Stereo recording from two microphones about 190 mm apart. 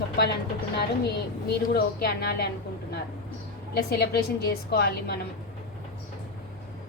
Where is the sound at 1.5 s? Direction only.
55° left (ahead or behind).